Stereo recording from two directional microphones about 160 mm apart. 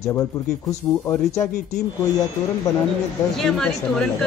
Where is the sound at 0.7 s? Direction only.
20° left (ahead or behind).